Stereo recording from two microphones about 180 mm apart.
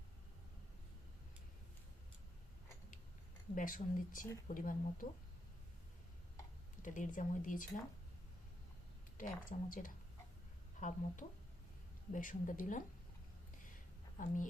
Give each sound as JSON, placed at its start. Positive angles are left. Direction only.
{"t": 3.5, "sound": "speech", "side_deg": 50}
{"t": 6.8, "sound": "speech", "side_deg": 45}
{"t": 9.1, "sound": "speech", "side_deg": 50}